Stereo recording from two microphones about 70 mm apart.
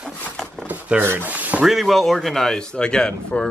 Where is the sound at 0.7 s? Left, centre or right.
Right.